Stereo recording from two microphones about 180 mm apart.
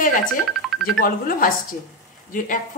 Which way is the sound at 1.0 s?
50° left (ahead or behind).